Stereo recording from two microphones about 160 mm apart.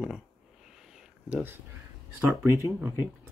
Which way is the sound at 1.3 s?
10° right (ahead or behind).